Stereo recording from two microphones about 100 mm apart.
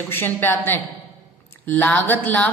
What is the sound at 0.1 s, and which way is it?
A woman's voice, 20° left (ahead or behind).